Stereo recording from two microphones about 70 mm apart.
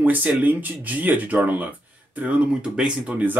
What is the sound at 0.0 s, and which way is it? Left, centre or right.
Speech, right.